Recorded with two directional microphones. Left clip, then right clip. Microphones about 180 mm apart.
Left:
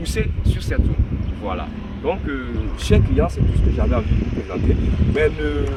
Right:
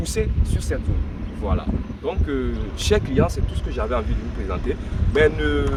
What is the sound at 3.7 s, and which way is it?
Speech, 5° right (ahead or behind).